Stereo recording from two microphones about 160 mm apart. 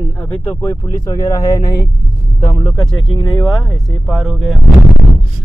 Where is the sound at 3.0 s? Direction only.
30° left (ahead or behind).